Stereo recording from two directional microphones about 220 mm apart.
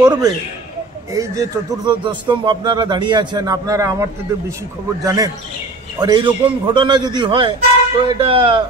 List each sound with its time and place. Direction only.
0.0 s a man's voice: 20° right (ahead or behind)